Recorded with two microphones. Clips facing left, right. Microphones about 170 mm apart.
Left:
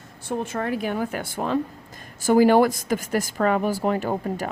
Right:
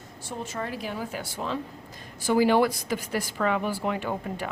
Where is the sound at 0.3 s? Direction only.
55° left (ahead or behind).